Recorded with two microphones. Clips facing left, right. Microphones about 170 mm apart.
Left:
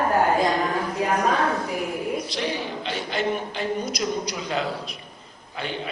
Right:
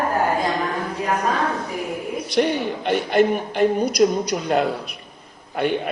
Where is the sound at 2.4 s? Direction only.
60° right (ahead or behind).